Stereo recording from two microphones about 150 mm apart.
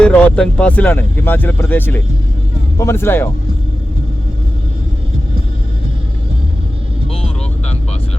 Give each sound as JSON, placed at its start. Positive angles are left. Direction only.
{"t": 0.0, "sound": "speech", "side_deg": 10}